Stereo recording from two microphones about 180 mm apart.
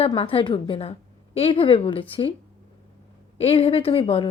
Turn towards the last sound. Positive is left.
turn(degrees=30)  # may be behind; listen again after turning